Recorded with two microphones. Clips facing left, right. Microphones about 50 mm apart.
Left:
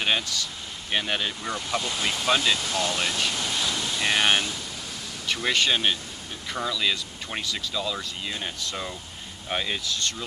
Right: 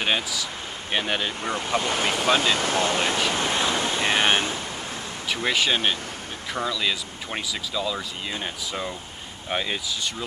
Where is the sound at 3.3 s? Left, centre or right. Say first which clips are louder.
Right 5 dB; right.